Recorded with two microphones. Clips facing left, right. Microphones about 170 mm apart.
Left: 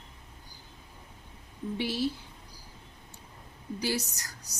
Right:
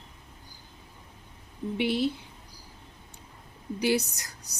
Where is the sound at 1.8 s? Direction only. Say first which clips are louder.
Right 4 dB; 20° right (ahead or behind).